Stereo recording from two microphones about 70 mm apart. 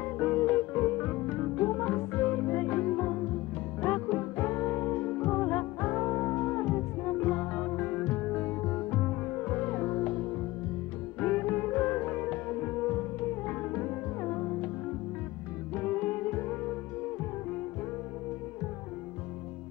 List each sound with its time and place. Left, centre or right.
0.0 s music: left
15.7 s music: centre